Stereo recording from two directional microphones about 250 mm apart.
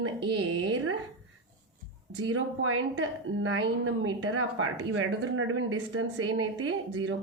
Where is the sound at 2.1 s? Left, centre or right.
Right.